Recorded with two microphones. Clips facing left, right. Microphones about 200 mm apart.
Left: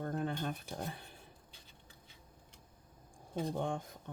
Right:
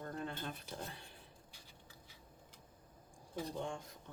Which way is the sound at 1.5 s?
25° left (ahead or behind).